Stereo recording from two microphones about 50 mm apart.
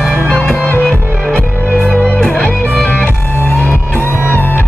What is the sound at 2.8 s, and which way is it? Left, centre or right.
Music, left.